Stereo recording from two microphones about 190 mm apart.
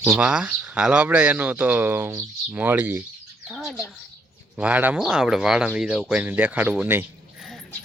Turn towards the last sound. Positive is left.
turn(degrees=-5)  # may be behind; listen again after turning